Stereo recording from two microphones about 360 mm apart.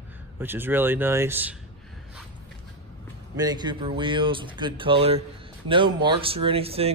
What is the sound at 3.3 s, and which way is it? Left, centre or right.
A man's voice, centre.